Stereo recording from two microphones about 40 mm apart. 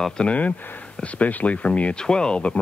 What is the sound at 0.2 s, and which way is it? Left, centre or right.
Speech, left.